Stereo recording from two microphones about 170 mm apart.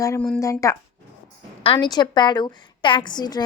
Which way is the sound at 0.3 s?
20° left (ahead or behind).